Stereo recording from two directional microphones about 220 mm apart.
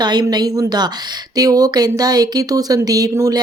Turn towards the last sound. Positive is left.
turn(degrees=-15)  # may be behind; listen again after turning